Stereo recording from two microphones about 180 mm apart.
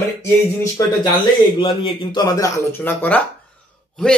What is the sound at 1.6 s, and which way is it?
Speech, 25° left (ahead or behind).